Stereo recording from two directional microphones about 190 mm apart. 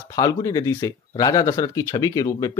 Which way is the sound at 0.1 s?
20° left (ahead or behind).